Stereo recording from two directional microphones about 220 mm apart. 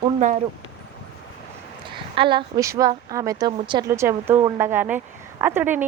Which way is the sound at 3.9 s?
10° right (ahead or behind).